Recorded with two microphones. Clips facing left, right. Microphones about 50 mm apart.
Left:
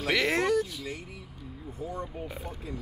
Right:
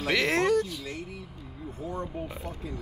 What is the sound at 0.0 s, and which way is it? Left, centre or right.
Speech, centre.